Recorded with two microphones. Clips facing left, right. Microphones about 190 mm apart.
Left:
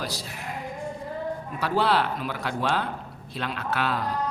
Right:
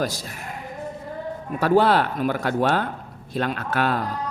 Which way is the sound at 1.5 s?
50° right (ahead or behind).